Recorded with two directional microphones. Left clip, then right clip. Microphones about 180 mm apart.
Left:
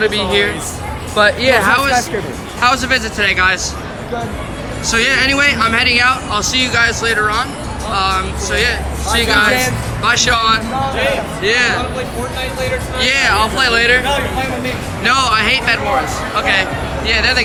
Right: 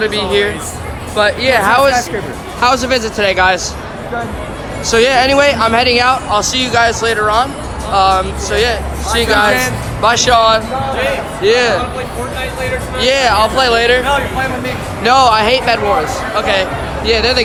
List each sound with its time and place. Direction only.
0.0 s speech: 5° right (ahead or behind)
1.1 s speech: centre (ahead or behind)
1.6 s speech: 15° right (ahead or behind)
2.6 s speech: 30° right (ahead or behind)
4.9 s speech: 20° right (ahead or behind)
13.0 s speech: 20° right (ahead or behind)
14.0 s speech: 35° right (ahead or behind)
15.0 s speech: 20° right (ahead or behind)
17.1 s speech: 30° right (ahead or behind)